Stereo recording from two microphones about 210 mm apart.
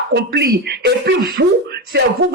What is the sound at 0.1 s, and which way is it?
Speech, 50° right (ahead or behind).